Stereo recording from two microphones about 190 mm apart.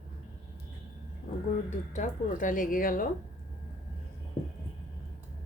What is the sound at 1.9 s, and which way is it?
Speech, 40° left (ahead or behind).